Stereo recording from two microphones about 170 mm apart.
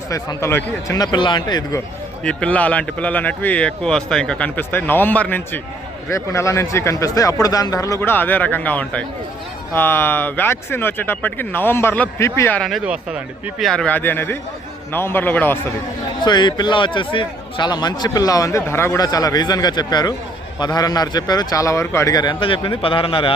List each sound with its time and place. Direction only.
0.1 s a man's voice: 20° left (ahead or behind)
2.2 s a man's voice: 5° left (ahead or behind)
12.6 s a man's voice: 5° right (ahead or behind)
16.2 s a man's voice: 25° left (ahead or behind)